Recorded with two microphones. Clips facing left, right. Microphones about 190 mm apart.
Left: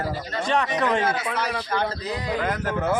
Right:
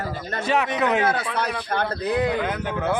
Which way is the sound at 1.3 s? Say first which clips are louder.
Right 1 dB; 60° right (ahead or behind).